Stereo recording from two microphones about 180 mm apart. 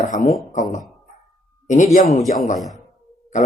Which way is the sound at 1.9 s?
45° left (ahead or behind).